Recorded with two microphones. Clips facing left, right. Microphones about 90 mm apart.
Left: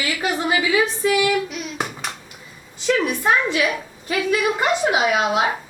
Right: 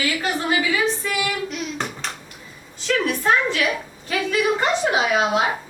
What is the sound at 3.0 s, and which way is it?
Speech, 15° left (ahead or behind).